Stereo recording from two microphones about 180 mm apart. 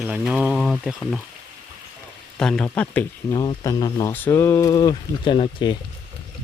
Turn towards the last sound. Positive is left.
turn(degrees=25)  # may be behind; listen again after turning